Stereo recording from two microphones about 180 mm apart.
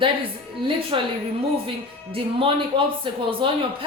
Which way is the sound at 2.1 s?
30° right (ahead or behind).